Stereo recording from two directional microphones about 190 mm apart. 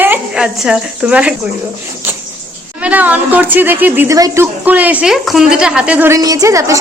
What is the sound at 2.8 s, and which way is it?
A woman's voice, 10° right (ahead or behind).